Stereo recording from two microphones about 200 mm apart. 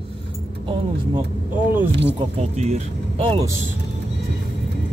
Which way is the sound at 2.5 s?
35° right (ahead or behind).